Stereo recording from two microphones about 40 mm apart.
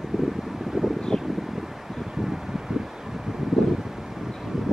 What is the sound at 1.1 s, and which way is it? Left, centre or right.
Wind, centre.